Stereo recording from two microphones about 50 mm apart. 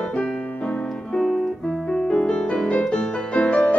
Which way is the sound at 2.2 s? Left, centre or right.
Centre.